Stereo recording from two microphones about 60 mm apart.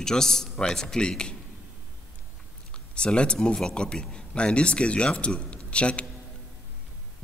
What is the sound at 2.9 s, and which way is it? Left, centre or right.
A man's voice, centre.